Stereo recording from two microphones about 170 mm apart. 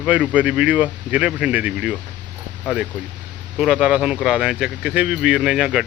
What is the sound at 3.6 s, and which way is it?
Speech, 5° right (ahead or behind).